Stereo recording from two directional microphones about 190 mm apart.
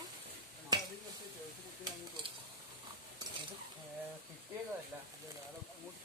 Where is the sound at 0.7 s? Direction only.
20° right (ahead or behind).